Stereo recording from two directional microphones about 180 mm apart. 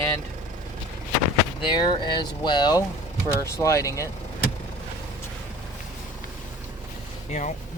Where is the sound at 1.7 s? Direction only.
25° left (ahead or behind).